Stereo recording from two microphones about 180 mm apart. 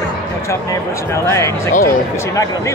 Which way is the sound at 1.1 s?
15° left (ahead or behind).